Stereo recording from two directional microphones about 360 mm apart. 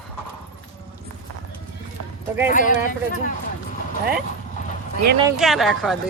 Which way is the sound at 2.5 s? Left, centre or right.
Left.